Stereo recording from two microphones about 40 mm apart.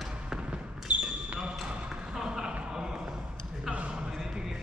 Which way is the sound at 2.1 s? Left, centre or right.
Centre.